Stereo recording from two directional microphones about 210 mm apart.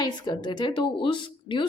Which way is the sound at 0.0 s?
20° left (ahead or behind).